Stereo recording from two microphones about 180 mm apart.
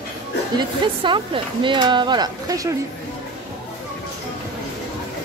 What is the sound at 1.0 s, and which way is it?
Speech, 25° right (ahead or behind).